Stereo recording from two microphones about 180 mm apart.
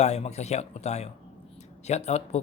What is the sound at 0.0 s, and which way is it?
A man's voice, 35° left (ahead or behind).